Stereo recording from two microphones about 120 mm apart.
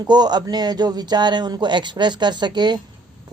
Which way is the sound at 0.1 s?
35° right (ahead or behind).